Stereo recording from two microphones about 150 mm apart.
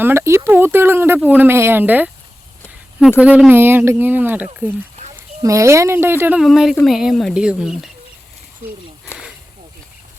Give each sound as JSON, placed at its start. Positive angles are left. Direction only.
{"t": 0.0, "sound": "speech", "side_deg": -15}
{"t": 3.2, "sound": "speech", "side_deg": -10}
{"t": 6.4, "sound": "speech", "side_deg": 0}